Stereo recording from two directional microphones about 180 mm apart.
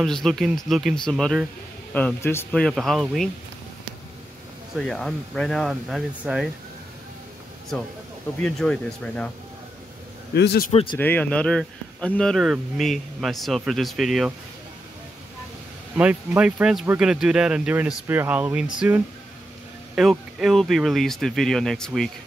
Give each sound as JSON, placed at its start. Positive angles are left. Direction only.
{"t": 0.0, "sound": "speech", "side_deg": 0}
{"t": 4.7, "sound": "speech", "side_deg": 0}
{"t": 8.4, "sound": "speech", "side_deg": 5}
{"t": 10.3, "sound": "a man's voice", "side_deg": 65}
{"t": 10.7, "sound": "a man's voice", "side_deg": 30}
{"t": 11.0, "sound": "speech", "side_deg": 10}
{"t": 16.0, "sound": "speech", "side_deg": -5}